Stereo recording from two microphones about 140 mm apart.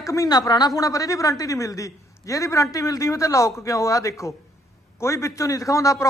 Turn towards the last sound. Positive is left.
turn(degrees=25)  # may be behind; listen again after turning